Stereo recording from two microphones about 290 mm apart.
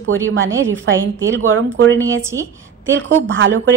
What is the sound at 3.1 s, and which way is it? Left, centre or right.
Speech, right.